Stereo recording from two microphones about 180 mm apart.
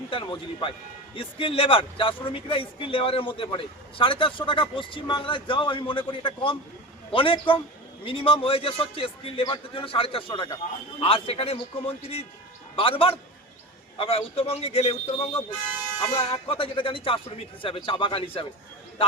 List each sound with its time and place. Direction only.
0.1 s a man's voice: 30° left (ahead or behind)